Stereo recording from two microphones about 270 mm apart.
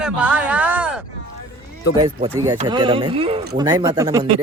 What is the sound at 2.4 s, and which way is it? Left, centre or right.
Speech, centre.